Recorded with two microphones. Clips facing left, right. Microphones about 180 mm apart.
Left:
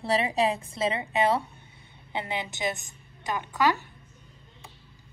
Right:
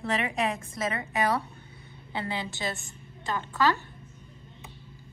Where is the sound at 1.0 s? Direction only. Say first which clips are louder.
Left 2 dB; 20° left (ahead or behind).